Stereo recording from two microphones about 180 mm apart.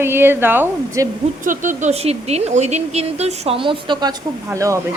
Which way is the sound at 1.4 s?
45° right (ahead or behind).